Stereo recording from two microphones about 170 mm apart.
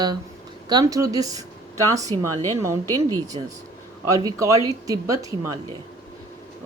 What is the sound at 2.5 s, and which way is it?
Speech, 15° right (ahead or behind).